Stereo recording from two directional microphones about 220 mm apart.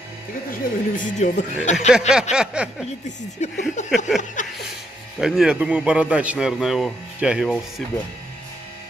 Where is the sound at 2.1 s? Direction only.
5° right (ahead or behind).